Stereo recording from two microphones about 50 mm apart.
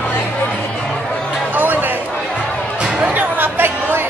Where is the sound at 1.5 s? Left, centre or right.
Right.